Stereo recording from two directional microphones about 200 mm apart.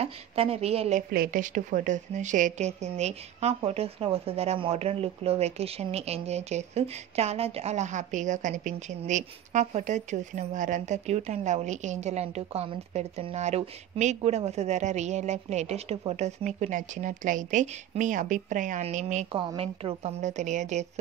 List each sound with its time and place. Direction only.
0.0 s a woman's voice: 30° right (ahead or behind)